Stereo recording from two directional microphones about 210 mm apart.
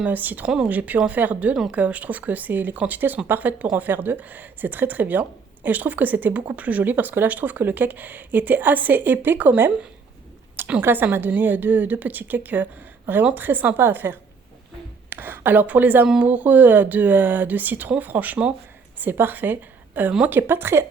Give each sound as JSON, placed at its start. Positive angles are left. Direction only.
{"t": 0.0, "sound": "speech", "side_deg": -10}